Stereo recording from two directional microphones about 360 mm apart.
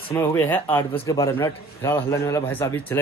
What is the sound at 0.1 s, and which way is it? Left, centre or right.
A man's voice, centre.